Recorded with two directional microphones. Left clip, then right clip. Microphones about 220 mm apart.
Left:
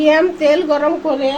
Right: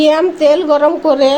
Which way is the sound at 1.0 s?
45° right (ahead or behind).